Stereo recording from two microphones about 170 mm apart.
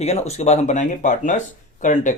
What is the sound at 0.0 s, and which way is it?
Speech, 40° left (ahead or behind).